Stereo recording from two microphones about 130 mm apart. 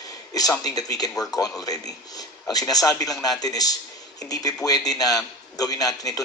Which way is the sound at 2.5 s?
30° left (ahead or behind).